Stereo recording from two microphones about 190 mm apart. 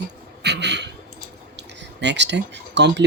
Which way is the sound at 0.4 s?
65° right (ahead or behind).